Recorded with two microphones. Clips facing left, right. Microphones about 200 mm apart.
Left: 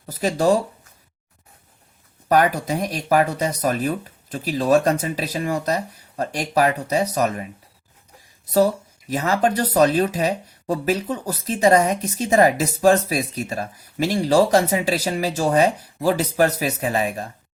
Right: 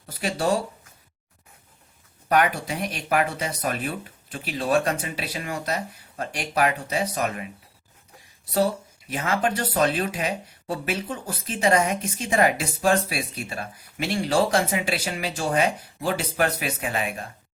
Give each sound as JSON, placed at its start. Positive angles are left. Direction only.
{"t": 0.0, "sound": "speech", "side_deg": 40}
{"t": 2.3, "sound": "speech", "side_deg": 35}
{"t": 8.5, "sound": "speech", "side_deg": 40}